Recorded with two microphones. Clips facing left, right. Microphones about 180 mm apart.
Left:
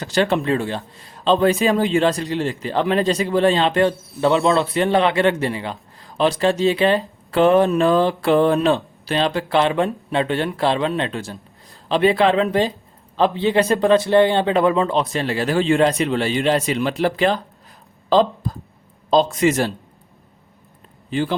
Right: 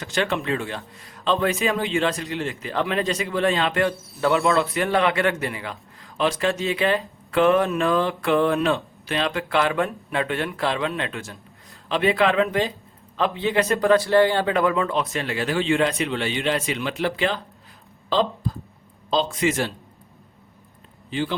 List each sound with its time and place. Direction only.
0.0 s a man's voice: 35° left (ahead or behind)
21.1 s speech: 45° left (ahead or behind)